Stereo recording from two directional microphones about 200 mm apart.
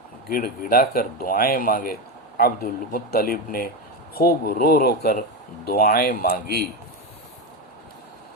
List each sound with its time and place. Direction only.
0.3 s a man's voice: 45° left (ahead or behind)